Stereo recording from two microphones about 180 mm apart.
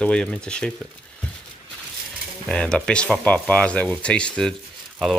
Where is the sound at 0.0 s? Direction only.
5° left (ahead or behind).